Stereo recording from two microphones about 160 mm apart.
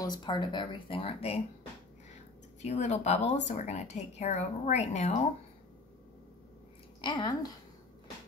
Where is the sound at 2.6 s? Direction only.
45° left (ahead or behind).